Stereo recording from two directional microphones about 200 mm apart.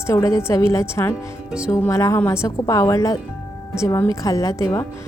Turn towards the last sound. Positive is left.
turn(degrees=15)  # may be behind; listen again after turning